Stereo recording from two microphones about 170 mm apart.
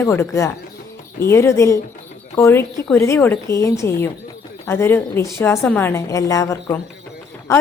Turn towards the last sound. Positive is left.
turn(degrees=20)  # may be behind; listen again after turning